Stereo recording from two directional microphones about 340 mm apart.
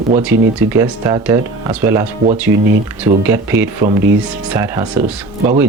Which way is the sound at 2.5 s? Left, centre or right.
Right.